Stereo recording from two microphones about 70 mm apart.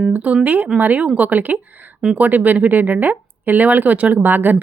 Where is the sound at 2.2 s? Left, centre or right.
Right.